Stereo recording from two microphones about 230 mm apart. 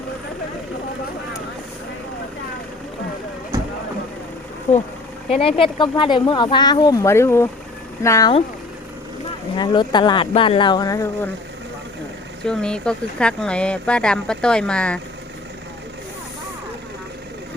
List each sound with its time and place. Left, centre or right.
5.3 s speech: left
9.6 s speech: centre
12.5 s speech: centre